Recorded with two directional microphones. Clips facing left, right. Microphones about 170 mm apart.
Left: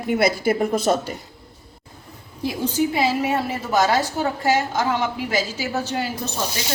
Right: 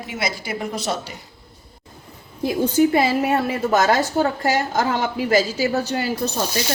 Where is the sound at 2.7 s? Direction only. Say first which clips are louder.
Right 4 dB; 50° right (ahead or behind).